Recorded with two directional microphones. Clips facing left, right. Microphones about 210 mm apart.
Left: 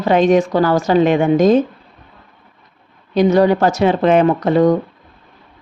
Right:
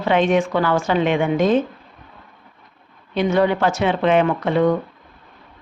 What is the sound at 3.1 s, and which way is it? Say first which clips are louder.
Speech: left 5 dB; 40° left (ahead or behind).